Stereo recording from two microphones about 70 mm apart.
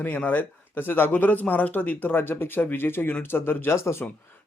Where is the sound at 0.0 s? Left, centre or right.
Left.